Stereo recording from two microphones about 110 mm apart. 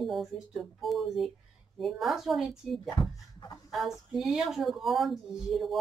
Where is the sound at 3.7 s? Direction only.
Centre (ahead or behind).